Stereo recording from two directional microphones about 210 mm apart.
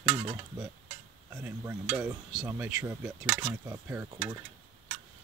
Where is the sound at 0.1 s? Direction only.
20° right (ahead or behind).